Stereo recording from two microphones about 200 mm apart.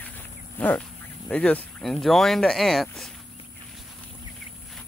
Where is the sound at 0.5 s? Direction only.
10° left (ahead or behind).